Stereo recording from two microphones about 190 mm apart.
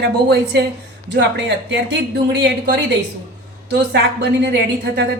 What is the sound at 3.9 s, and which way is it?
Speech, 60° right (ahead or behind).